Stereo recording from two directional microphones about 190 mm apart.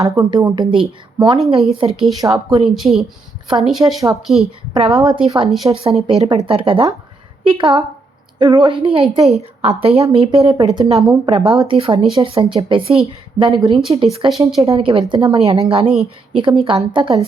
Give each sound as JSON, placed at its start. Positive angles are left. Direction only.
{"t": 0.0, "sound": "a woman's voice", "side_deg": -20}
{"t": 2.7, "sound": "speech", "side_deg": 0}
{"t": 5.1, "sound": "speech", "side_deg": -25}
{"t": 9.0, "sound": "speech", "side_deg": 0}
{"t": 9.4, "sound": "a woman's voice", "side_deg": -30}